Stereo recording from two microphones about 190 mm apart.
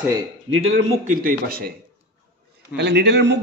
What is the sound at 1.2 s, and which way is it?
Speech, 50° right (ahead or behind).